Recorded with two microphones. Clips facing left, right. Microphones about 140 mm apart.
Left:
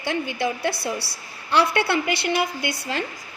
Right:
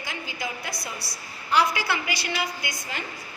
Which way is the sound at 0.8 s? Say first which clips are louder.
Left 8 dB; 30° left (ahead or behind).